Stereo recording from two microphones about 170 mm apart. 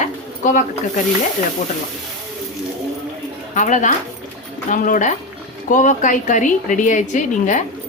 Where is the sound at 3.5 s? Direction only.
45° left (ahead or behind).